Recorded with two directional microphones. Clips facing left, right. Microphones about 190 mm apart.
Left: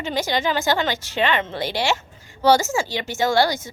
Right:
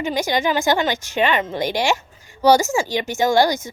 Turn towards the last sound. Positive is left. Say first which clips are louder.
# right 3 dB
turn(degrees=-20)  # may be behind; listen again after turning